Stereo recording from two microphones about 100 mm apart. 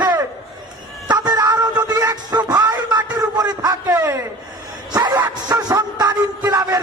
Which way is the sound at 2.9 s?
45° right (ahead or behind).